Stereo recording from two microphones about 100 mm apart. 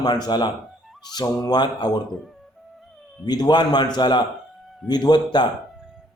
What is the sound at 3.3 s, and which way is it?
Speech, 45° left (ahead or behind).